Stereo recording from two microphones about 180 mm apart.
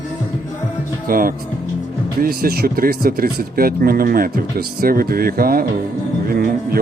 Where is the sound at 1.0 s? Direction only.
50° right (ahead or behind).